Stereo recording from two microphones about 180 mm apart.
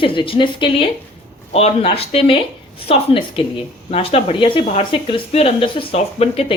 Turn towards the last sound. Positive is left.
turn(degrees=35)  # may be behind; listen again after turning